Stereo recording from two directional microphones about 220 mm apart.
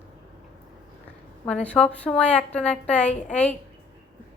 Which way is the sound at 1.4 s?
5° left (ahead or behind).